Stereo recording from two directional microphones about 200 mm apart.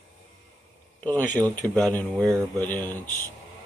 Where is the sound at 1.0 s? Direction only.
10° left (ahead or behind).